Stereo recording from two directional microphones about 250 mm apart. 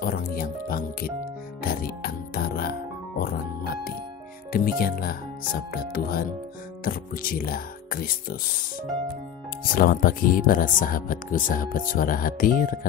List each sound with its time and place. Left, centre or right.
0.0 s music: left
4.5 s speech: left
9.8 s speech: left